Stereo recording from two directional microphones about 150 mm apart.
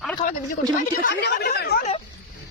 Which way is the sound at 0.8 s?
85° left.